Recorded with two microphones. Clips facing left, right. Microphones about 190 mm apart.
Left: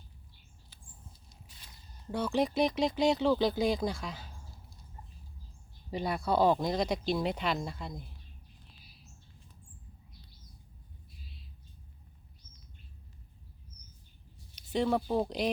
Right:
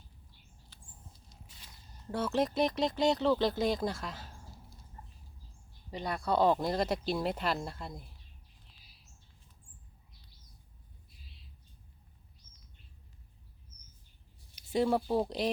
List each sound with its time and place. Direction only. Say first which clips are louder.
2.0 s speech: left 1 dB; centre (ahead or behind)
5.9 s speech: left 2 dB; 10° left (ahead or behind)
14.7 s speech: even; 5° right (ahead or behind)